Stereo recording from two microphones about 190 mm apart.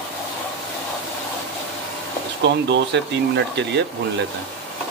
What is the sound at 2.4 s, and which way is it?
Speech, 65° right (ahead or behind).